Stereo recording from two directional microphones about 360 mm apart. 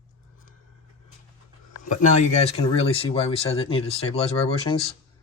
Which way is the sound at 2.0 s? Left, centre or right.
Centre.